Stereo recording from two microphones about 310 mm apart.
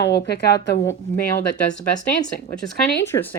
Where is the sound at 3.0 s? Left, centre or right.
Centre.